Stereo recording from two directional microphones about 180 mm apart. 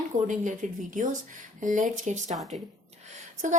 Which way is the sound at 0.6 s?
45° right (ahead or behind).